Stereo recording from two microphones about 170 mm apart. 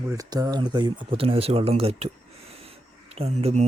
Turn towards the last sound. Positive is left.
turn(degrees=-40)  # may be behind; listen again after turning